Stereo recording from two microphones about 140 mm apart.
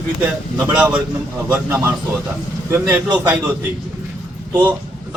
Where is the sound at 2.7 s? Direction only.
30° right (ahead or behind).